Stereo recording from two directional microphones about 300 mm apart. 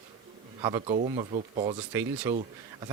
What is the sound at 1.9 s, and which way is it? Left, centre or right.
Speech, centre.